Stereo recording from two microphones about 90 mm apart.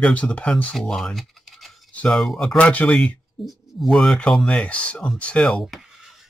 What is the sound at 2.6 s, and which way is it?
Speech, 15° left (ahead or behind).